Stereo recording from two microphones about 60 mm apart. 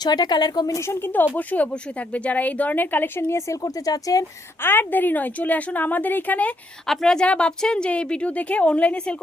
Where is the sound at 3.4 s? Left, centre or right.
Left.